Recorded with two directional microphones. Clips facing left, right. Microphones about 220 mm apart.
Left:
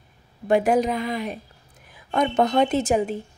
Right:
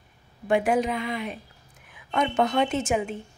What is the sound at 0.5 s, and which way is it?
A woman's voice, 40° left (ahead or behind).